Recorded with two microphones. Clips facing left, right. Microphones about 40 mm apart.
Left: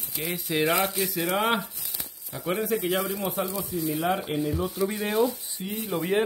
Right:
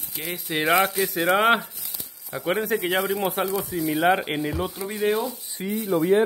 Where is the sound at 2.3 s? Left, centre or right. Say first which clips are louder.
Right 4 dB; centre.